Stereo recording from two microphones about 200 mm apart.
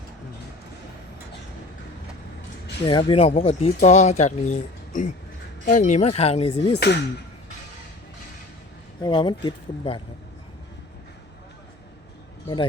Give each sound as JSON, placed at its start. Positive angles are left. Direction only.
{"t": 2.8, "sound": "speech", "side_deg": 25}
{"t": 6.7, "sound": "speech", "side_deg": 55}
{"t": 9.0, "sound": "speech", "side_deg": 20}